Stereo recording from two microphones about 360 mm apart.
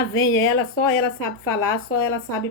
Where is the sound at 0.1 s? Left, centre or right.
Left.